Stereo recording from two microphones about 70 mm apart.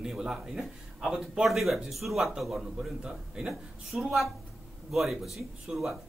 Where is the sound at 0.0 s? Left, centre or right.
Centre.